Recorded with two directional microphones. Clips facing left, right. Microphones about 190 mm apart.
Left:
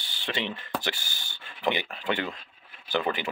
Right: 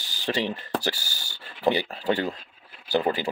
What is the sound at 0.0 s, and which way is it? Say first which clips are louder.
Speech: right 5 dB; 40° right (ahead or behind).